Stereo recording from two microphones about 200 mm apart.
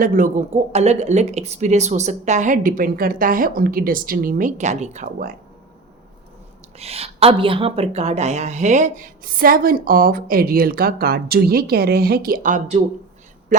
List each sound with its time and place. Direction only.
0.0 s speech: 40° right (ahead or behind)
6.7 s a woman's voice: 30° right (ahead or behind)